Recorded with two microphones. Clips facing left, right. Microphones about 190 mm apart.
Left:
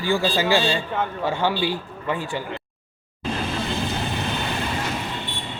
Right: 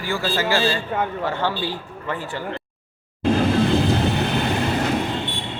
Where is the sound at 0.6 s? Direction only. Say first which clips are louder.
Right 1 dB; centre (ahead or behind).